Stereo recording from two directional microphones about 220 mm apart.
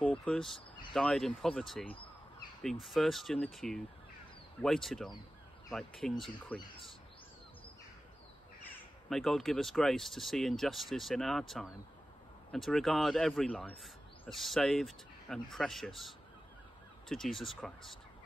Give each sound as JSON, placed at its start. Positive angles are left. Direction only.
{"t": 0.0, "sound": "speech", "side_deg": 5}
{"t": 9.1, "sound": "speech", "side_deg": 0}